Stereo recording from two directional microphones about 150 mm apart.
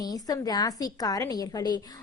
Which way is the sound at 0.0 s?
25° left (ahead or behind).